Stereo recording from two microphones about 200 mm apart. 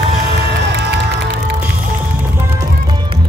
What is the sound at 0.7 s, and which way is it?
Music, 55° right (ahead or behind).